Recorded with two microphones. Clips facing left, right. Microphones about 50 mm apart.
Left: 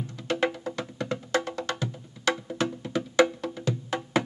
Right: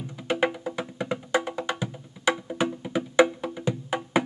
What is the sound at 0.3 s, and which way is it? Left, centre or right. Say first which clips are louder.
Music: right 2 dB; centre.